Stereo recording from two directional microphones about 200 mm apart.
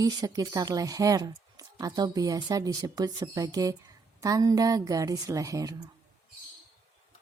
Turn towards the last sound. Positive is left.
turn(degrees=-15)  # may be behind; listen again after turning